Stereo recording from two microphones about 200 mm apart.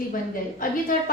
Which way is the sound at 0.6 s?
45° left (ahead or behind).